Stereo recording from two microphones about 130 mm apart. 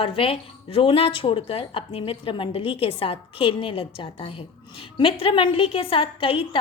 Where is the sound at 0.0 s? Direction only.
45° left (ahead or behind).